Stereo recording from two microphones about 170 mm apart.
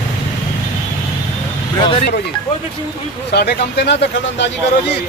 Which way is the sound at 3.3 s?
75° left (ahead or behind).